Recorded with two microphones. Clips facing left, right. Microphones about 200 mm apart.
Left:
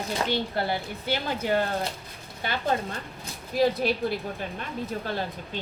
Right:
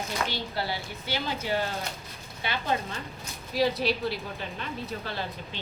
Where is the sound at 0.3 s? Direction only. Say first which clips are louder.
Left 5 dB; 50° left (ahead or behind).